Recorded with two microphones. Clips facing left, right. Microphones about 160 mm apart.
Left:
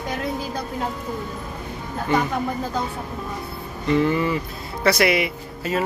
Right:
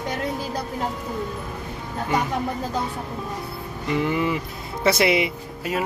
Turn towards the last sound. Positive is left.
turn(degrees=-20)  # may be behind; listen again after turning